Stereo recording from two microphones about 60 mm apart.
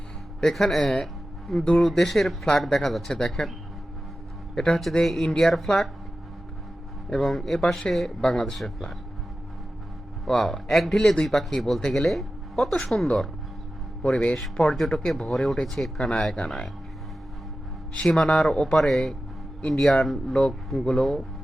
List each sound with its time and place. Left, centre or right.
0.4 s speech: centre
4.5 s speech: centre
7.1 s speech: centre
10.2 s speech: centre
14.0 s speech: centre
14.8 s speech: centre
16.0 s speech: centre
16.3 s speech: centre
18.0 s speech: centre